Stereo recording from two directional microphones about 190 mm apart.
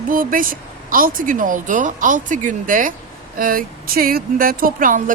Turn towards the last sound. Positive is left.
turn(degrees=-45)  # may be behind; listen again after turning